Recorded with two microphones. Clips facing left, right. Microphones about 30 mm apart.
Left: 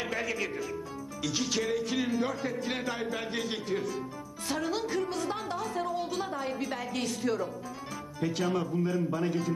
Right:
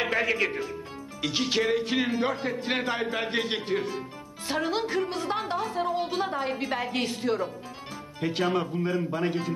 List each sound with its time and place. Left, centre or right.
0.0 s a man's voice: right